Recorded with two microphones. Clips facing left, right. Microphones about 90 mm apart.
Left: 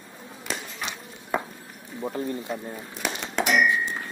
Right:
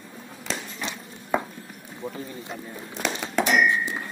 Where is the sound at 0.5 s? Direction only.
10° left (ahead or behind).